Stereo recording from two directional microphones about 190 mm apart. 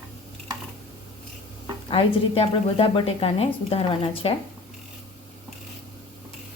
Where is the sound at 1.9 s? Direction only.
30° left (ahead or behind).